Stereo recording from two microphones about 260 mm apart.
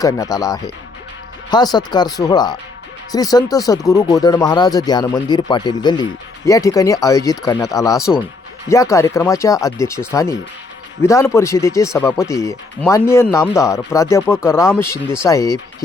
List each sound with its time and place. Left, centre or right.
0.0 s speech: centre